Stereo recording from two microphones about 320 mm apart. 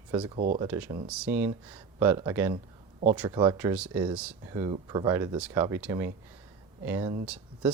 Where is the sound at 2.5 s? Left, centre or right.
Right.